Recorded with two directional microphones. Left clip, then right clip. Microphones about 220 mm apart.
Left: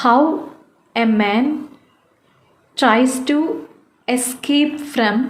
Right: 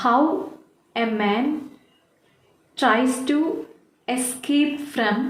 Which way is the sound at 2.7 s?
40° left (ahead or behind).